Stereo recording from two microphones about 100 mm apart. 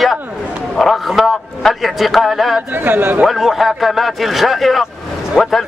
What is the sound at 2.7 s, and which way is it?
Speech, 20° right (ahead or behind).